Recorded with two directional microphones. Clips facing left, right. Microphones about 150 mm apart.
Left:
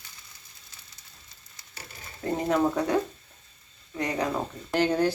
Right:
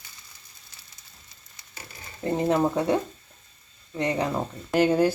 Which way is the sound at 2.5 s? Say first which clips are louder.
Right 1 dB; 20° right (ahead or behind).